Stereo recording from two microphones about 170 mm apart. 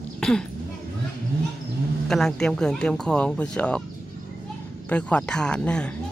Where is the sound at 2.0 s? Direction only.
5° left (ahead or behind).